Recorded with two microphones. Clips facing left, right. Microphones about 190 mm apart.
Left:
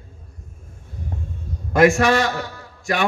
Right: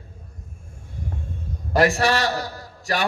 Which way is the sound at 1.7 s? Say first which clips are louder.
Left 4 dB; 35° right (ahead or behind).